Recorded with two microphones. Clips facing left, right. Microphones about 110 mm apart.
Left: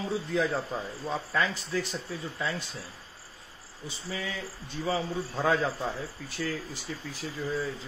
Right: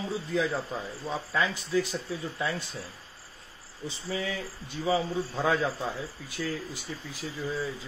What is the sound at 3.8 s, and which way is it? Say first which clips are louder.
Speech: right 3 dB; 25° right (ahead or behind).